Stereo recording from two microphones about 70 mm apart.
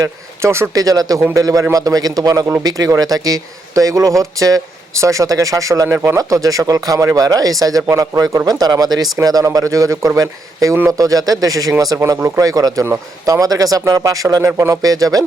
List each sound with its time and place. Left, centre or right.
0.0 s speech: right
0.7 s speech: right
8.4 s speech: right
11.9 s speech: right